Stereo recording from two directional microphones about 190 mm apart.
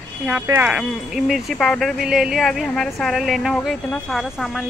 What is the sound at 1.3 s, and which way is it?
Speech, centre (ahead or behind).